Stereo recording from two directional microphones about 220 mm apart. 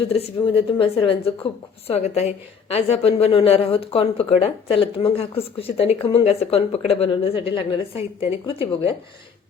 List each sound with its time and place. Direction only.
0.1 s a woman's voice: 25° left (ahead or behind)